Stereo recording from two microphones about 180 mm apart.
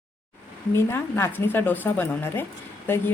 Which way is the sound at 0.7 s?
15° left (ahead or behind).